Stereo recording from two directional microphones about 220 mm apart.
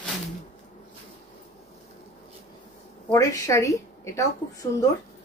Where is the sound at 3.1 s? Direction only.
15° left (ahead or behind).